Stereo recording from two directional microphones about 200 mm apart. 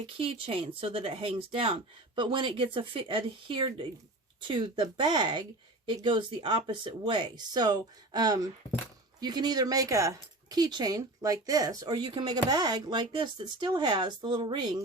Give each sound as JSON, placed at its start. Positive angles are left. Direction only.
{"t": 0.2, "sound": "speech", "side_deg": -25}